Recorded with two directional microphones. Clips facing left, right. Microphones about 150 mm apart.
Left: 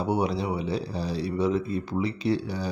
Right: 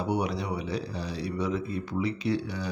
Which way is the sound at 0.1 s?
30° left (ahead or behind).